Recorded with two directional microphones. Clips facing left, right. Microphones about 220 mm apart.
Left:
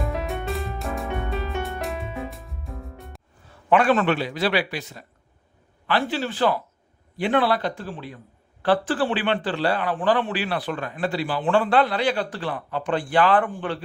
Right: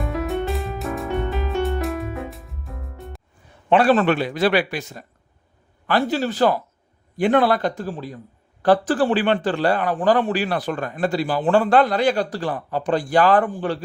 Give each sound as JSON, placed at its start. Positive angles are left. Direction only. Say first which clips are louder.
{"t": 0.0, "sound": "music", "louder": "right 4 dB", "side_deg": 0}
{"t": 3.7, "sound": "a man's voice", "louder": "right 3 dB", "side_deg": -35}